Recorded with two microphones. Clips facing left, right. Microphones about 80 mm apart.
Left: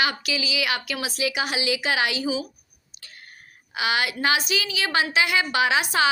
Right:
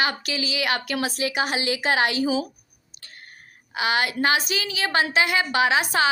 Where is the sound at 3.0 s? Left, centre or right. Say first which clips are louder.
Right 1 dB; right.